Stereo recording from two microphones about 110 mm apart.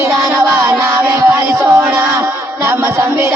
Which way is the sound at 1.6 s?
25° right (ahead or behind).